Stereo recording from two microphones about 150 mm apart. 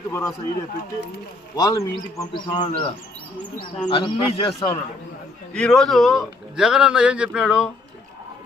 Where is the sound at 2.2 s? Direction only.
30° left (ahead or behind).